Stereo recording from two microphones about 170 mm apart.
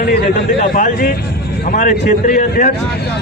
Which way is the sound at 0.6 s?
50° left (ahead or behind).